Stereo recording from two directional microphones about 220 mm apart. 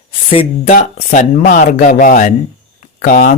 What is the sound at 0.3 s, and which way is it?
Speech, 25° left (ahead or behind).